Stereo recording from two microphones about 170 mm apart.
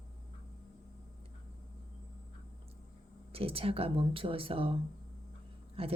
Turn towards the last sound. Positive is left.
turn(degrees=-35)  # may be behind; listen again after turning